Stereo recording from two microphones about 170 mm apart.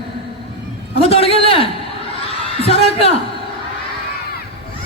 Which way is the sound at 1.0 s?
35° left (ahead or behind).